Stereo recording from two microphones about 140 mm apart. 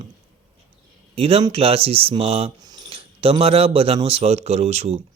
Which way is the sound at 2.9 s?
40° right (ahead or behind).